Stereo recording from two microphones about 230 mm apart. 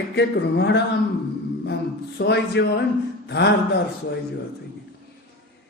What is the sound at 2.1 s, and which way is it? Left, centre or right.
Speech, left.